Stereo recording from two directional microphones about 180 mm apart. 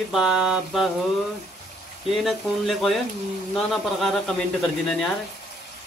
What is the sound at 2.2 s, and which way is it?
Speech, centre (ahead or behind).